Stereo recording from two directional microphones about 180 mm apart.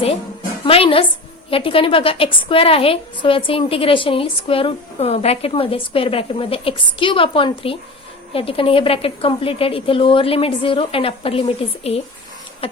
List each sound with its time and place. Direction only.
0.6 s a woman's voice: 30° left (ahead or behind)